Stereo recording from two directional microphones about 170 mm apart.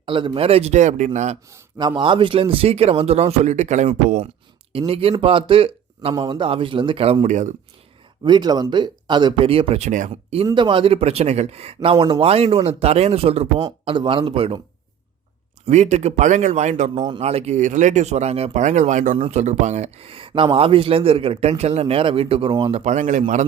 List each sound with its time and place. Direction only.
0.0 s speech: 30° right (ahead or behind)
1.5 s a man's voice: 15° right (ahead or behind)
2.0 s speech: 30° right (ahead or behind); by 7.5 s 45° right (ahead or behind)
8.2 s speech: 25° right (ahead or behind); by 10.3 s 45° right (ahead or behind)
10.4 s speech: 30° right (ahead or behind)
13.6 s speech: 25° right (ahead or behind)
15.6 s speech: 40° right (ahead or behind)
19.1 s speech: 35° right (ahead or behind)